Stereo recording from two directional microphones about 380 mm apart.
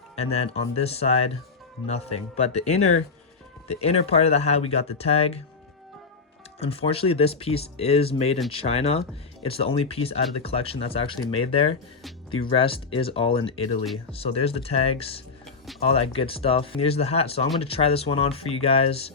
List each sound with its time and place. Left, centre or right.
0.2 s speech: centre
6.6 s speech: centre
15.4 s music: centre
15.8 s speech: centre